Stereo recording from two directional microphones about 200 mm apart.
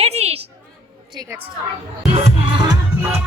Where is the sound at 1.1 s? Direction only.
15° right (ahead or behind).